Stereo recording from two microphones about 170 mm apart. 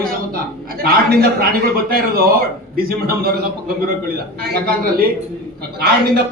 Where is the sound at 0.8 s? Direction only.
60° right (ahead or behind).